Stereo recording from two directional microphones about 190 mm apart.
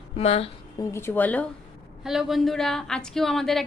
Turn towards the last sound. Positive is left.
turn(degrees=0)  # may be behind; listen again after turning